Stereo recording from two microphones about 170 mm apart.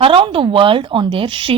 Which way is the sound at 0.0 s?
30° right (ahead or behind).